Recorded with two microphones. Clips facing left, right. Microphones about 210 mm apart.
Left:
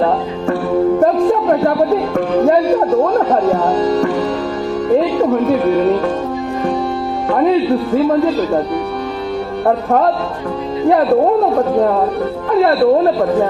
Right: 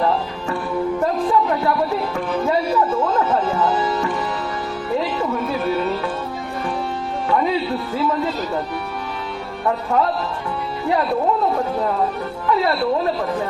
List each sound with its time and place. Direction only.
0.9 s music: 50° left (ahead or behind)
2.3 s speech: 55° left (ahead or behind)
3.0 s music: 45° left (ahead or behind)
5.1 s music: 50° left (ahead or behind)
7.3 s music: 45° left (ahead or behind)
7.9 s speech: 45° left (ahead or behind)
9.6 s speech: 45° left (ahead or behind)
11.5 s speech: 45° left (ahead or behind)